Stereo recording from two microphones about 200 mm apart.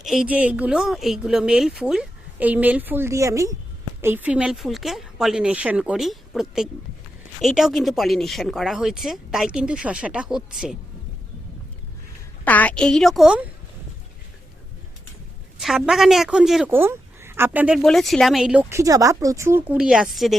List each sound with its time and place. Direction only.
0.0 s speech: 5° right (ahead or behind)
12.5 s speech: 5° left (ahead or behind)
15.5 s speech: centre (ahead or behind)